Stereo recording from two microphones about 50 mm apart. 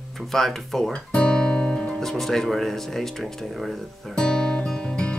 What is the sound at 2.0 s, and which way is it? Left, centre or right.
Speech, centre.